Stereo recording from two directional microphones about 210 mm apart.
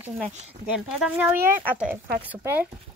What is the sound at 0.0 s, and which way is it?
Speech, 5° right (ahead or behind).